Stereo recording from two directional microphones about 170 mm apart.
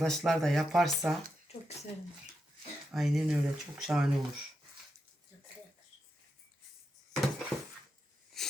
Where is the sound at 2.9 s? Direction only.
Centre (ahead or behind).